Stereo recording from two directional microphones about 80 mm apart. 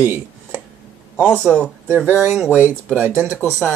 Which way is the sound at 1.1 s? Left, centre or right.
Centre.